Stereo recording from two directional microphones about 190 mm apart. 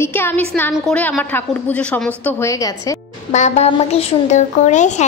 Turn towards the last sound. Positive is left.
turn(degrees=40)  # may be behind; listen again after turning